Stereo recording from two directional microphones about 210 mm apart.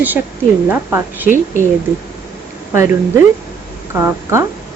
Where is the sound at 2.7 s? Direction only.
10° right (ahead or behind).